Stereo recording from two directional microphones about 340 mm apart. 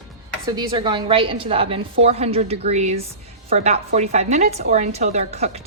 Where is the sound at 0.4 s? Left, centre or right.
Centre.